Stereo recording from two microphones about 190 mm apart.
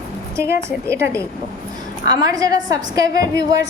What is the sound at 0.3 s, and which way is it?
A woman's voice, 15° right (ahead or behind).